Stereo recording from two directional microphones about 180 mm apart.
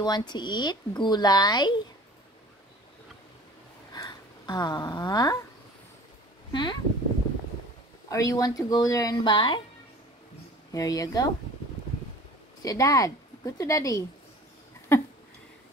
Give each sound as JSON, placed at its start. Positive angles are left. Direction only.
{"t": 0.0, "sound": "speech", "side_deg": 25}
{"t": 3.9, "sound": "a sound", "side_deg": 20}
{"t": 6.5, "sound": "speech", "side_deg": 25}
{"t": 8.1, "sound": "speech", "side_deg": 20}
{"t": 10.7, "sound": "speech", "side_deg": 20}
{"t": 12.6, "sound": "speech", "side_deg": 20}
{"t": 14.9, "sound": "a sound", "side_deg": 15}